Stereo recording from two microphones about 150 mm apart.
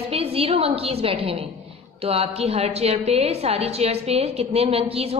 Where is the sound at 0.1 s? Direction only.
40° right (ahead or behind).